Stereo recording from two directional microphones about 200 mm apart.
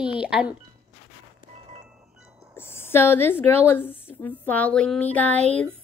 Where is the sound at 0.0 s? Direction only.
5° right (ahead or behind).